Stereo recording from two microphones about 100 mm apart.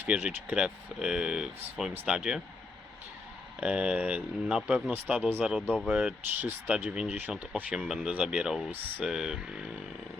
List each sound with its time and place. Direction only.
0.0 s speech: 10° right (ahead or behind)
3.6 s speech: 10° right (ahead or behind)
7.9 s speech: 5° right (ahead or behind)